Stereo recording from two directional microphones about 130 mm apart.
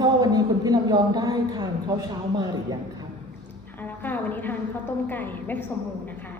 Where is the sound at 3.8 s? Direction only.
15° left (ahead or behind).